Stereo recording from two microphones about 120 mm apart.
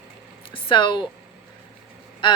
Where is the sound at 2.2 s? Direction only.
45° left (ahead or behind).